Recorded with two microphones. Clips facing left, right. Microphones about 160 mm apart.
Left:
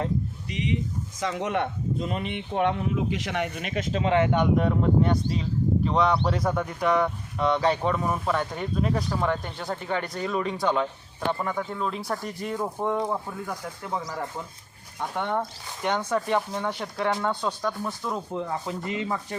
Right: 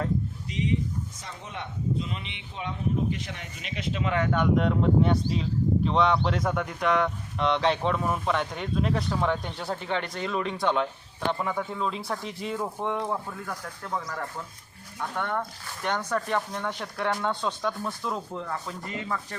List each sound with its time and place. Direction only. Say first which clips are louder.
1.2 s speech: left 12 dB; 85° left; by 4.0 s 45° left (ahead or behind)
4.0 s speech: left 4 dB; 25° left (ahead or behind)
4.5 s speech: left 1 dB; 5° left (ahead or behind)
18.3 s speech: left 4 dB; 20° left (ahead or behind)